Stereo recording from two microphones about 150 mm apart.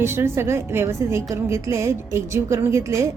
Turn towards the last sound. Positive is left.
turn(degrees=-20)  # may be behind; listen again after turning